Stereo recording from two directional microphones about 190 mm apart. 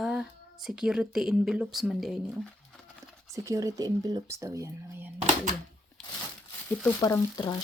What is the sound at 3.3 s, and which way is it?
Speech, 15° right (ahead or behind).